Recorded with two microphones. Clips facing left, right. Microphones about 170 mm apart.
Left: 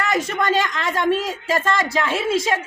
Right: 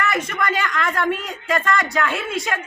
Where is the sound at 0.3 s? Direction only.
30° left (ahead or behind).